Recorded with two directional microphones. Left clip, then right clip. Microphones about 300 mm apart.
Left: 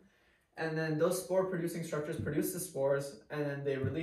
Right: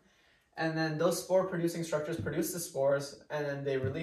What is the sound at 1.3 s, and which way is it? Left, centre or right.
Speech, centre.